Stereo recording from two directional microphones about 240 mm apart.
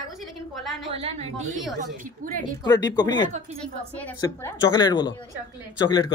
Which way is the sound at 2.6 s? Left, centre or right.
Centre.